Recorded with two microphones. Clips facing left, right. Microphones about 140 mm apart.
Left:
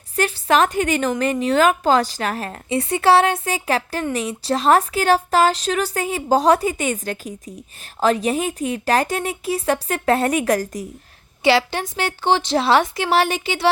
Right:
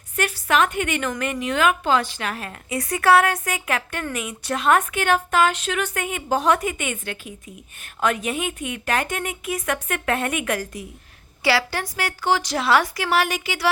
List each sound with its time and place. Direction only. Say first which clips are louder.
0.2 s speech: left 3 dB; 30° left (ahead or behind)
11.4 s a woman's voice: left 4 dB; 20° left (ahead or behind)